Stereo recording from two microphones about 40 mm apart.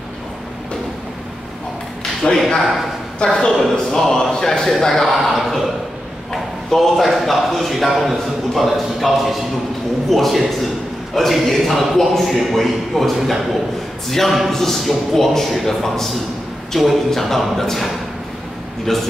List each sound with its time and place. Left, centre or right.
2.2 s speech: centre
2.6 s a man's voice: centre
3.3 s a man's voice: centre